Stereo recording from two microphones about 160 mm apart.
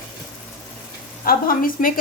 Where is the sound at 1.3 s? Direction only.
65° left (ahead or behind).